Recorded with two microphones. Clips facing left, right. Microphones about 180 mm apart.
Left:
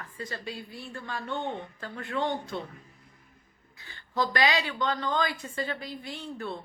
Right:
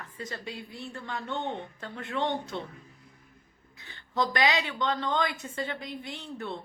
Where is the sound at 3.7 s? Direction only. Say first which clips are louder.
Even; 20° right (ahead or behind).